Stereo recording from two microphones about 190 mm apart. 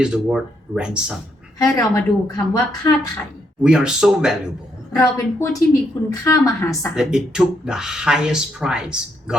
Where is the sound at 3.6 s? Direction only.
5° right (ahead or behind).